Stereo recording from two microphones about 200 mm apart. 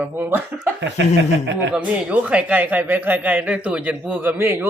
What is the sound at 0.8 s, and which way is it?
Speech, 60° right (ahead or behind).